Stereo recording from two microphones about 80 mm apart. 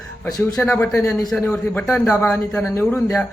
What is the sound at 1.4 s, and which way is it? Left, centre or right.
Speech, left.